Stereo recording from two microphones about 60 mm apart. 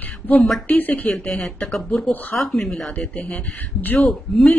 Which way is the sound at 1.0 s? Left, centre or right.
Centre.